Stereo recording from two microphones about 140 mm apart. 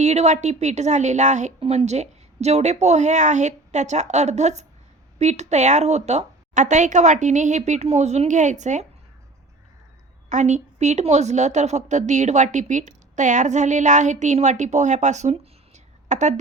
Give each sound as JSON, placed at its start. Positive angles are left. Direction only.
{"t": 0.0, "sound": "a woman's voice", "side_deg": -55}
{"t": 1.5, "sound": "a woman's voice", "side_deg": -45}
{"t": 10.2, "sound": "a woman's voice", "side_deg": -55}